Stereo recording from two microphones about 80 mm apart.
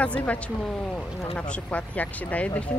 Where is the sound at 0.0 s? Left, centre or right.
Centre.